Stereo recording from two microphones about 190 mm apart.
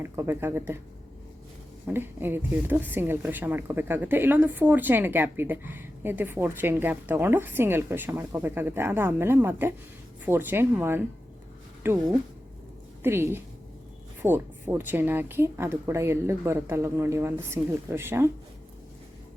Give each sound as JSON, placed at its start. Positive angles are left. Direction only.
{"t": 0.0, "sound": "speech", "side_deg": -10}
{"t": 1.9, "sound": "a woman's voice", "side_deg": -10}